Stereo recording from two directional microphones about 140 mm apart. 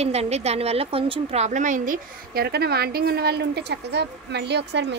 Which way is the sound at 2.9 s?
90° right.